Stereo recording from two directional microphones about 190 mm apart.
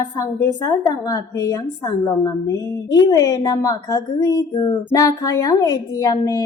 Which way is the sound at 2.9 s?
20° left (ahead or behind).